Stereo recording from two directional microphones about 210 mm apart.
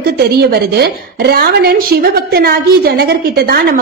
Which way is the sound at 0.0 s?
50° right (ahead or behind).